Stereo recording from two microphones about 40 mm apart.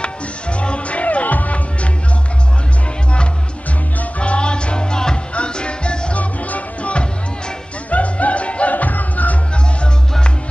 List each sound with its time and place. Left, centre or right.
0.0 s music: left
4.2 s music: left
6.1 s music: left